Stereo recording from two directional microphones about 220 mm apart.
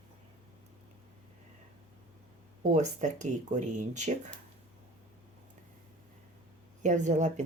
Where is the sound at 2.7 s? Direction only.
35° right (ahead or behind).